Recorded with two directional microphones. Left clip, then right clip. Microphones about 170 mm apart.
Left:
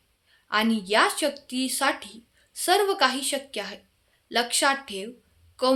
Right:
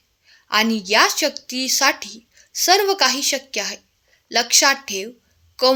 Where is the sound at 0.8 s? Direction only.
30° right (ahead or behind).